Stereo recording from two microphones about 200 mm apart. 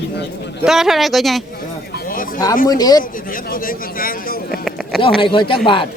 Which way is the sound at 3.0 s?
45° left (ahead or behind).